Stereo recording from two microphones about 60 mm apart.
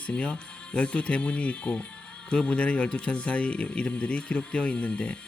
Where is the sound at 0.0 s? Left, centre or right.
Left.